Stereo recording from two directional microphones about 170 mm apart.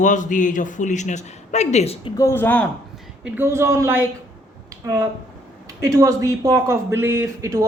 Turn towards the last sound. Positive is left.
turn(degrees=-20)  # may be behind; listen again after turning